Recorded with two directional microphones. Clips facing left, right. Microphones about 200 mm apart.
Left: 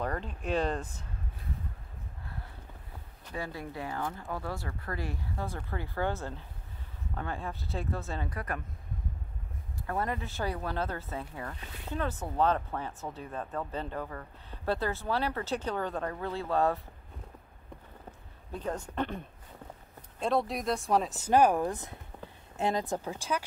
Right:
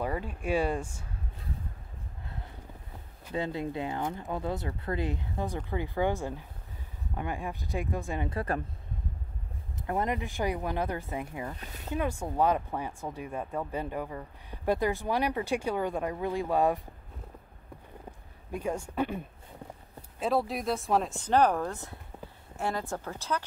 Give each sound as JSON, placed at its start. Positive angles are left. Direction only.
{"t": 0.0, "sound": "speech", "side_deg": -10}
{"t": 3.3, "sound": "speech", "side_deg": -20}
{"t": 8.3, "sound": "speech", "side_deg": -30}
{"t": 9.8, "sound": "speech", "side_deg": -20}
{"t": 18.5, "sound": "speech", "side_deg": -10}